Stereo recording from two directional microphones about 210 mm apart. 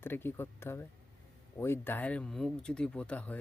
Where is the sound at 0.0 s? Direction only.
10° left (ahead or behind).